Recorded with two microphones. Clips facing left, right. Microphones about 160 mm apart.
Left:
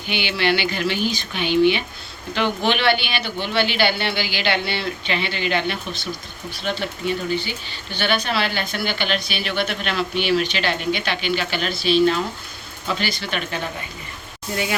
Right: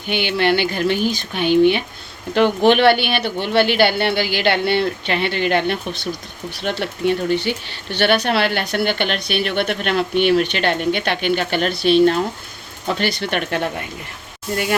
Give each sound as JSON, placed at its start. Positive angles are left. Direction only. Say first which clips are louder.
{"t": 0.1, "sound": "speech", "louder": "right 4 dB", "side_deg": -50}